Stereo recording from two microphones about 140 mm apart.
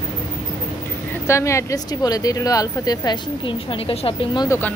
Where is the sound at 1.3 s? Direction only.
20° left (ahead or behind); by 4.4 s 40° left (ahead or behind).